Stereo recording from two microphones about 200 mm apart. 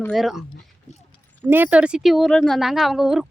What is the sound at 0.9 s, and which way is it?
Clip-clop, 35° left (ahead or behind).